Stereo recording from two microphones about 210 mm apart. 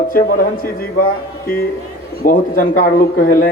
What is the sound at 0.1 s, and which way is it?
Speech, 45° left (ahead or behind).